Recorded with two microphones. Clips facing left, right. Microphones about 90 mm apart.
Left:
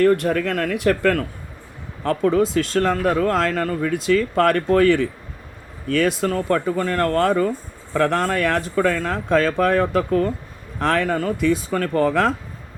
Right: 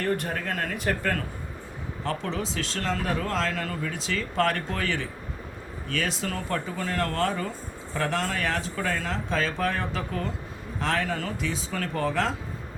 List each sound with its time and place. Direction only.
0.0 s speech: 70° left (ahead or behind)
2.0 s speech: 50° left (ahead or behind)